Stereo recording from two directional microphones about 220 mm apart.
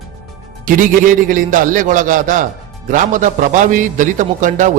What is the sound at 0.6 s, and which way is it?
A man's voice, 40° right (ahead or behind).